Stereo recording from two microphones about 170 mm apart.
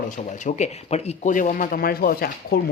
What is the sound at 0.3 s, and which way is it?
Speech, 45° left (ahead or behind).